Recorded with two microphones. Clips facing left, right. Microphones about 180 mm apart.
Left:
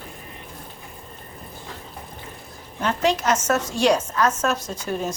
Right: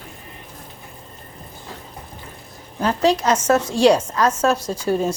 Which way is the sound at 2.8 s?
35° right (ahead or behind).